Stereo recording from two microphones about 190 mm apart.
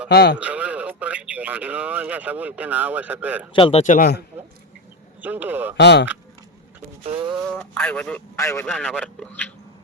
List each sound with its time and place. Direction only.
0.1 s speech: 60° left (ahead or behind)
0.3 s speech: 5° right (ahead or behind)
3.5 s speech: 30° left (ahead or behind)
5.2 s a man's voice: 10° right (ahead or behind)
5.7 s speech: 65° left (ahead or behind)
7.0 s a sound: 30° right (ahead or behind)
7.6 s a man's voice: 5° left (ahead or behind)
8.6 s a man's voice: centre (ahead or behind)